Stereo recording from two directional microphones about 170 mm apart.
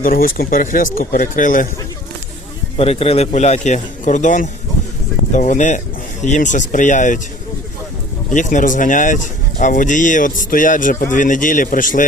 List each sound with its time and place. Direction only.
0.0 s speech: 60° left (ahead or behind)
2.7 s a man's voice: 35° left (ahead or behind)
8.3 s speech: 45° left (ahead or behind)